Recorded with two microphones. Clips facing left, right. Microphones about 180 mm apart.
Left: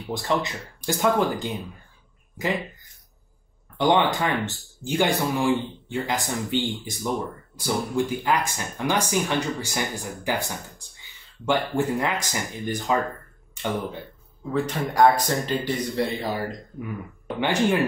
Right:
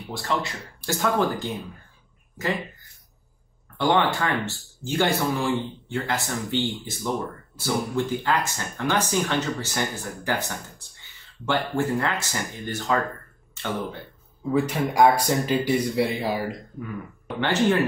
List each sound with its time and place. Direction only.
0.1 s speech: 20° left (ahead or behind)
3.7 s speech: 15° left (ahead or behind)
14.5 s speech: 10° right (ahead or behind)
17.4 s speech: 15° left (ahead or behind)